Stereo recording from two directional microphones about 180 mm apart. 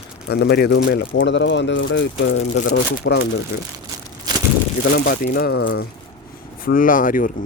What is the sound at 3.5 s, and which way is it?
Speech, 60° left (ahead or behind).